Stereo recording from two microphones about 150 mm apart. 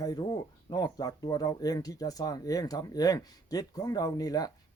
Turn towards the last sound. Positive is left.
turn(degrees=25)  # may be behind; listen again after turning